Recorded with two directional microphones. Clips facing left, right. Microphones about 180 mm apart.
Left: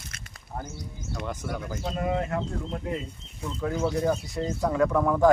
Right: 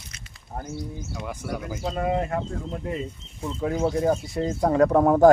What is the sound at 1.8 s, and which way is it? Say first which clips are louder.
Speech: right 3 dB; 25° right (ahead or behind).